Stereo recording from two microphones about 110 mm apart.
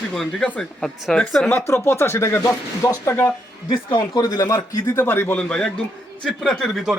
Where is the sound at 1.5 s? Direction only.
25° left (ahead or behind).